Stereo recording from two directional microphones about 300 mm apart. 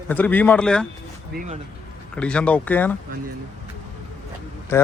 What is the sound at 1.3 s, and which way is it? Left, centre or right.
Speech, right.